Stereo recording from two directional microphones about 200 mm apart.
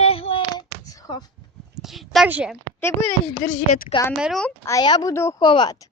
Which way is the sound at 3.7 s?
35° left (ahead or behind).